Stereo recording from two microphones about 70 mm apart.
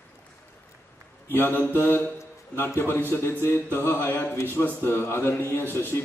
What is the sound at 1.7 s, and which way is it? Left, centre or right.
A man's voice, left.